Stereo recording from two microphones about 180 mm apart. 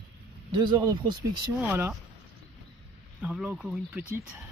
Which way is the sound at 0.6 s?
20° right (ahead or behind).